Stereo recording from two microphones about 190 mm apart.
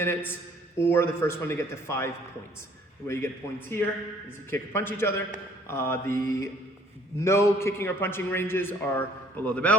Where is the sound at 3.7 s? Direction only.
15° left (ahead or behind).